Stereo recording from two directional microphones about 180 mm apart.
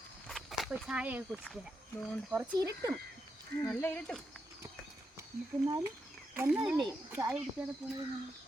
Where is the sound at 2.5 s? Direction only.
20° right (ahead or behind).